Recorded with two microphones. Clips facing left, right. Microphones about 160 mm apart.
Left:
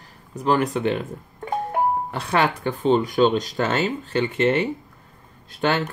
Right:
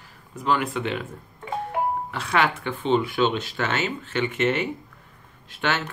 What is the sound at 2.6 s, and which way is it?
Speech, 40° left (ahead or behind).